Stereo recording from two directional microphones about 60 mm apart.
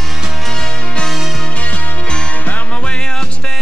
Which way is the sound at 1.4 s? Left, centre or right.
Left.